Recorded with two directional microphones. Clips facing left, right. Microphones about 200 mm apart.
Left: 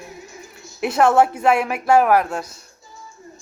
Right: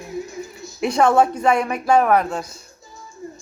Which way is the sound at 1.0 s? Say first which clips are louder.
Left 1 dB; 5° left (ahead or behind).